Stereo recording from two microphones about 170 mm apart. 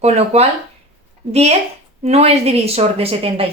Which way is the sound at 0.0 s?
40° right (ahead or behind).